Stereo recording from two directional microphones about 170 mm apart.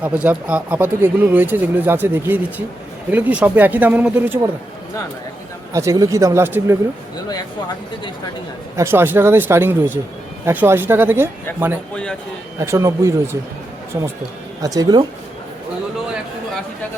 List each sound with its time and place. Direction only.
0.0 s speech: 10° right (ahead or behind)
5.7 s speech: 20° right (ahead or behind)
8.7 s speech: 15° right (ahead or behind)
12.5 s speech: 15° right (ahead or behind)
14.6 s speech: 20° right (ahead or behind)